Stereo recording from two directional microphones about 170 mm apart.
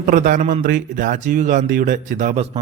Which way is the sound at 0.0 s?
50° right (ahead or behind).